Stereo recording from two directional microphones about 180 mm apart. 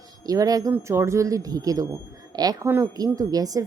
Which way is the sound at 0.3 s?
20° right (ahead or behind).